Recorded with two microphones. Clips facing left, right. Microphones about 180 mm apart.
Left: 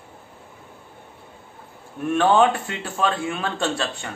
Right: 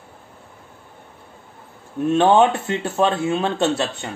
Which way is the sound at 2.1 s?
20° right (ahead or behind).